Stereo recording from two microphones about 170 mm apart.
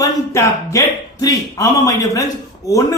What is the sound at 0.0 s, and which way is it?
A man's voice, 20° left (ahead or behind).